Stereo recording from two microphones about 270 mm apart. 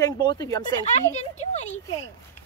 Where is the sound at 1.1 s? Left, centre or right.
Left.